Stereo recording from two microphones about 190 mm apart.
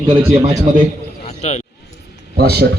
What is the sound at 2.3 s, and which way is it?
Speech, 55° right (ahead or behind).